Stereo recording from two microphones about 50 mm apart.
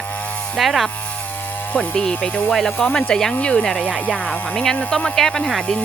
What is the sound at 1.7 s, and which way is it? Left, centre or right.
Speech, centre.